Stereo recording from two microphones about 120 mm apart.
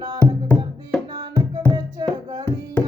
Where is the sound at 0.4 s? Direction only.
15° left (ahead or behind).